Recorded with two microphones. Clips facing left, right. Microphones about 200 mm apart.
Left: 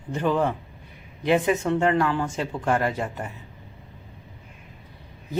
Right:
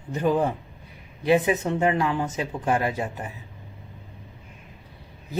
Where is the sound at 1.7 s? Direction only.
15° right (ahead or behind).